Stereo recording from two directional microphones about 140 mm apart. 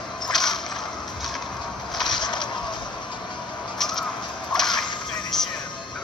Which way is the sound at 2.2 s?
35° left (ahead or behind).